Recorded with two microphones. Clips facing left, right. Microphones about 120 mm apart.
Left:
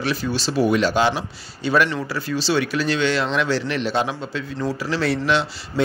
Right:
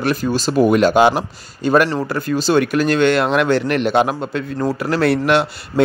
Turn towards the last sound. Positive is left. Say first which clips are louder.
# right 5 dB
turn(degrees=-55)  # may be behind; listen again after turning